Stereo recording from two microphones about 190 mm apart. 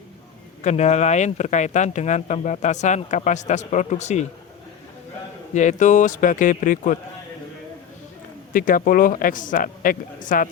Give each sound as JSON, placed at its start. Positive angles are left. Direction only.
{"t": 0.6, "sound": "speech", "side_deg": 35}
{"t": 5.5, "sound": "speech", "side_deg": 40}
{"t": 8.5, "sound": "speech", "side_deg": 45}